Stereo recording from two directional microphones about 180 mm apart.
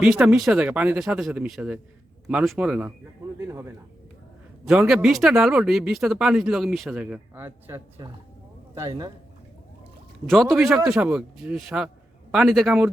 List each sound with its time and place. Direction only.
0.0 s a man's voice: 5° right (ahead or behind)
4.6 s speech: 5° right (ahead or behind); by 9.1 s 20° right (ahead or behind)
10.2 s speech: centre (ahead or behind)